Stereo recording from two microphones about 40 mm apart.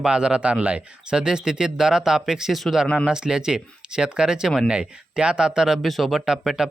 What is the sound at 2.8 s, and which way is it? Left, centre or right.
Speech, left.